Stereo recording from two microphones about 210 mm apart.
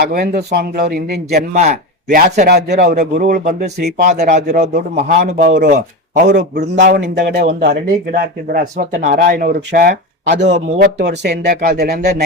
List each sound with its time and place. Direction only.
0.0 s a man's voice: 45° right (ahead or behind)
6.7 s a man's voice: 40° right (ahead or behind)